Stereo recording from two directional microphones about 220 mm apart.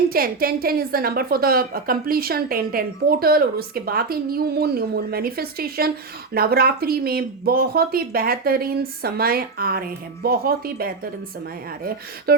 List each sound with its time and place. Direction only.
0.1 s a woman's voice: 40° right (ahead or behind)